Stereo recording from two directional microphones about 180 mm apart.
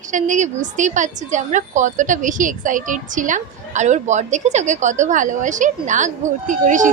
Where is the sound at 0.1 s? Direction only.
45° right (ahead or behind).